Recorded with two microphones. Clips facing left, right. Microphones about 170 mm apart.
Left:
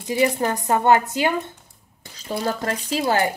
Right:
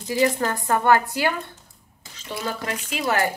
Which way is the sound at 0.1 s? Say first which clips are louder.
Left 1 dB; 20° left (ahead or behind).